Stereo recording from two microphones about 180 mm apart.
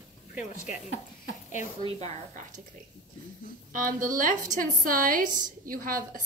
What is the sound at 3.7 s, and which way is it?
A woman's voice, 50° right (ahead or behind).